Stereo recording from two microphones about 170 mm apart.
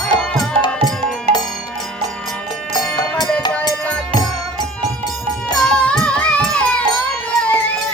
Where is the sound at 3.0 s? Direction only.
25° left (ahead or behind).